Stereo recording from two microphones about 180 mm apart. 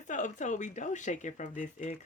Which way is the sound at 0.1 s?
45° left (ahead or behind).